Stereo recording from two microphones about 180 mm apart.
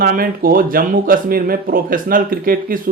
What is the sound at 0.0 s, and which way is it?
Speech, 55° right (ahead or behind).